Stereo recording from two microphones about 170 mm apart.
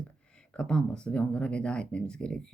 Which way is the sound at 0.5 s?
5° left (ahead or behind).